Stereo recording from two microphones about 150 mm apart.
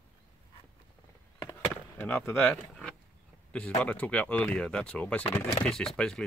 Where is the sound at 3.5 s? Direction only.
10° left (ahead or behind).